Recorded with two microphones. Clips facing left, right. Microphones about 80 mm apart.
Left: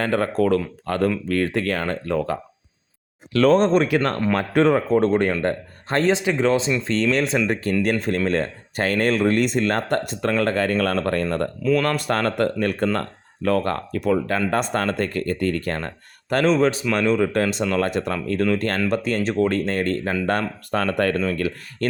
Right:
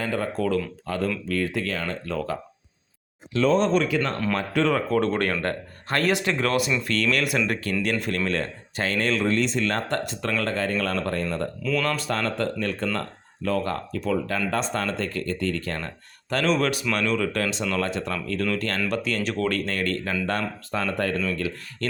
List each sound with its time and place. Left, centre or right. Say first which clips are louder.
0.0 s speech: left 6 dB; left
3.3 s speech: left 5 dB; left
3.6 s speech: left 4 dB; left
3.8 s speech: left 4 dB; left
4.4 s speech: left 6 dB; left
4.9 s speech: left 5 dB; left
20.7 s speech: left 5 dB; left
21.1 s speech: left 4 dB; left